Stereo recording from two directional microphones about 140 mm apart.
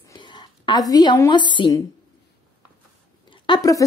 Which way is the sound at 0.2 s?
30° left (ahead or behind).